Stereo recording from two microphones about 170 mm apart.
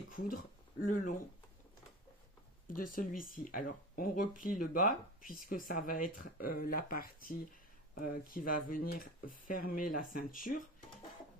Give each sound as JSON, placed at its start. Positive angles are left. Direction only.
{"t": 0.8, "sound": "speech", "side_deg": 50}
{"t": 2.7, "sound": "speech", "side_deg": 55}